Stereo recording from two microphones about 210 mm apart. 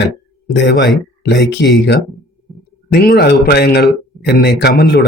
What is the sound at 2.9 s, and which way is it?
Speech, 45° left (ahead or behind).